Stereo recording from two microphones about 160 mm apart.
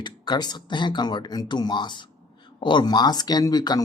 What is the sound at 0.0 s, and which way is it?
Speech, 25° left (ahead or behind).